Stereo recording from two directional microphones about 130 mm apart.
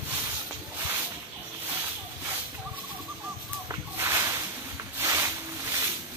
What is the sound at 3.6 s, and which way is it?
Fowl, 20° right (ahead or behind).